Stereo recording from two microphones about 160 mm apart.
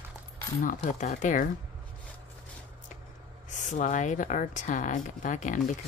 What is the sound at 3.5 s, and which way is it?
A woman's voice, 50° left (ahead or behind).